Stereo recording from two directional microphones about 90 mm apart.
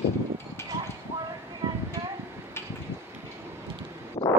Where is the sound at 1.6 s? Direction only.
55° right (ahead or behind).